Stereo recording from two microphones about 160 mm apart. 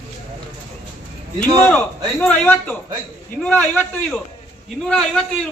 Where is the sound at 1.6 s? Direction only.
10° left (ahead or behind).